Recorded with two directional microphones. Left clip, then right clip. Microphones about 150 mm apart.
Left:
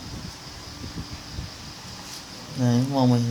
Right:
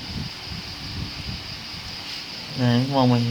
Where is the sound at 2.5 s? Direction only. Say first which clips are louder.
Right 3 dB; 15° right (ahead or behind).